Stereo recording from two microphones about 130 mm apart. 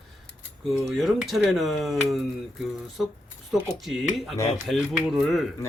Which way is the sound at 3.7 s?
Centre (ahead or behind).